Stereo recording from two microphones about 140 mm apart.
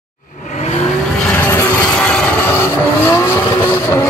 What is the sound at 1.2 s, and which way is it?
Vehicle, 15° left (ahead or behind).